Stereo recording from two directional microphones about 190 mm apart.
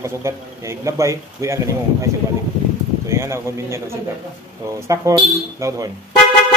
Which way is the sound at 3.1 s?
15° right (ahead or behind).